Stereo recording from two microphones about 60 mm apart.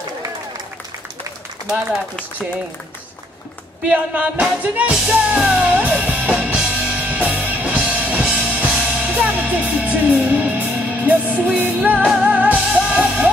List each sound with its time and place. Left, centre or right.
3.9 s music: right